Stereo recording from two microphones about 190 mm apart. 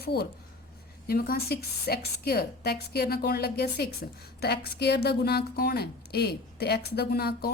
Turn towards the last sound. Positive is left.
turn(degrees=55)  # may be behind; listen again after turning